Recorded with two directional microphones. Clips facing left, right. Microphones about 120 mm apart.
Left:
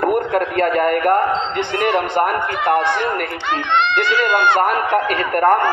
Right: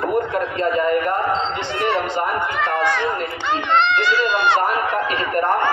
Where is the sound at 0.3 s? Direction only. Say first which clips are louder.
Left 3 dB; 65° left (ahead or behind).